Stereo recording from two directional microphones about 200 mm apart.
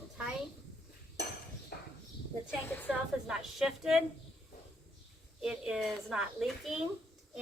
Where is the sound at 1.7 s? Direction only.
55° left (ahead or behind).